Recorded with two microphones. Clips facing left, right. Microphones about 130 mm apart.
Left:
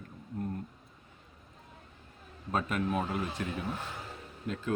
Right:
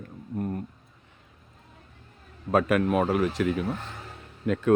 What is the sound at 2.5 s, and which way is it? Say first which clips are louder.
Speech: right 9 dB; 75° right (ahead or behind).